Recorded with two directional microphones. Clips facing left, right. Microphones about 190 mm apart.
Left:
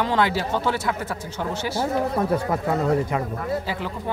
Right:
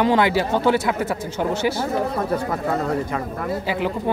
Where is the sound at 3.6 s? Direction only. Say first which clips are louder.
Right 6 dB; 15° right (ahead or behind).